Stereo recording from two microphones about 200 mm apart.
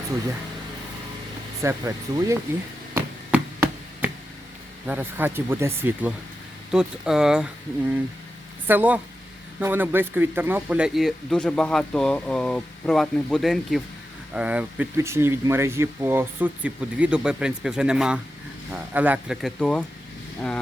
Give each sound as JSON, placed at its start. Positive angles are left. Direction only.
{"t": 1.6, "sound": "speech", "side_deg": -15}
{"t": 2.9, "sound": "chop", "side_deg": -10}
{"t": 4.9, "sound": "speech", "side_deg": -10}
{"t": 8.6, "sound": "speech", "side_deg": -10}